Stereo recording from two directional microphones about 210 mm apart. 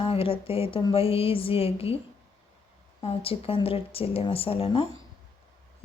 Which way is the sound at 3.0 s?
25° left (ahead or behind).